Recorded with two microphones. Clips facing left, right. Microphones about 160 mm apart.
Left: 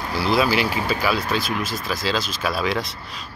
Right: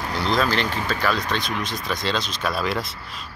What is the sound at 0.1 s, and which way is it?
Speech, 5° left (ahead or behind).